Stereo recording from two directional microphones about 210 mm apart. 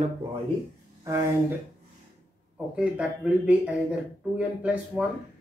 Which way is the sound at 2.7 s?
5° right (ahead or behind).